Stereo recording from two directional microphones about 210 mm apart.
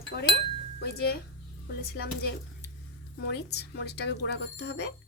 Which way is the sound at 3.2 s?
50° left (ahead or behind).